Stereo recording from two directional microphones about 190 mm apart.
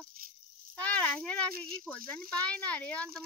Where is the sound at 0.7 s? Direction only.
5° left (ahead or behind).